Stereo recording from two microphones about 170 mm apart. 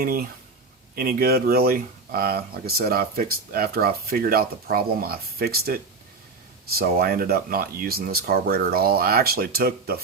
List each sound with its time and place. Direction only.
0.0 s speech: 65° right (ahead or behind)